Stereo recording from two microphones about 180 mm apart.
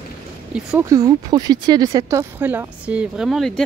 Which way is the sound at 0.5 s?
15° right (ahead or behind).